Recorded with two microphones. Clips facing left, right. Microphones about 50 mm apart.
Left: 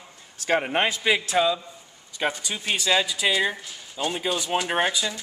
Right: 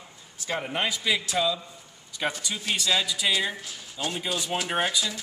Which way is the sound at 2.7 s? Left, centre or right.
Centre.